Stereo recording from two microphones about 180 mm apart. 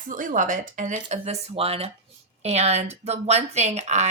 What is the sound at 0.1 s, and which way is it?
Speech, 45° right (ahead or behind).